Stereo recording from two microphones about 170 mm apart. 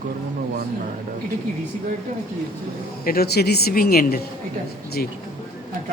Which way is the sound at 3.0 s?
65° left (ahead or behind).